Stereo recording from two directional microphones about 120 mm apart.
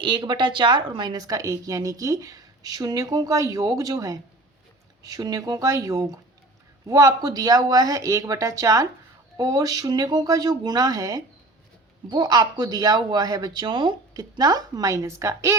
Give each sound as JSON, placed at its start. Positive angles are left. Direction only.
{"t": 0.0, "sound": "speech", "side_deg": -40}